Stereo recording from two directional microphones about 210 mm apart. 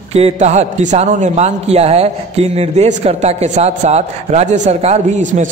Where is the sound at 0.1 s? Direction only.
30° right (ahead or behind).